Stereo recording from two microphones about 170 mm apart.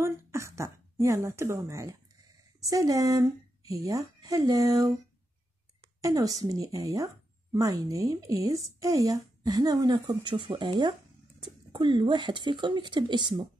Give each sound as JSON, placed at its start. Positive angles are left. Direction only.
{"t": 0.0, "sound": "speech", "side_deg": -15}
{"t": 5.9, "sound": "a woman's voice", "side_deg": -20}